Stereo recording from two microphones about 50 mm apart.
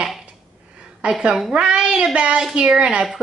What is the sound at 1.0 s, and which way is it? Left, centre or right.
A woman's voice, right.